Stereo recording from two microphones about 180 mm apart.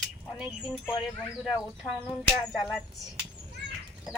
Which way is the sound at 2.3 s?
15° left (ahead or behind).